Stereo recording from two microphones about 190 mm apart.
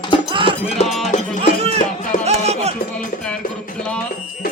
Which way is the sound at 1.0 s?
40° left (ahead or behind).